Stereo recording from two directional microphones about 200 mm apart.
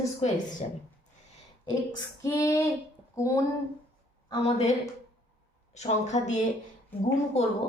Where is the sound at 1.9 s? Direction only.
15° left (ahead or behind).